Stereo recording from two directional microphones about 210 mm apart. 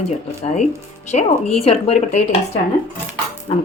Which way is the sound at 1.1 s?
30° left (ahead or behind).